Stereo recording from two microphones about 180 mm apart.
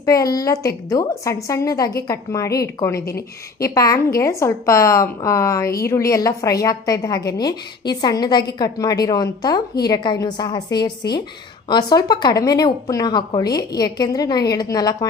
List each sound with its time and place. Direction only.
0.0 s a woman's voice: 20° left (ahead or behind)